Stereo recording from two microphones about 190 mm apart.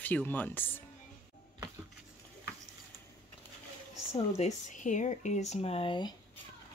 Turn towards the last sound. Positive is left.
turn(degrees=25)  # may be behind; listen again after turning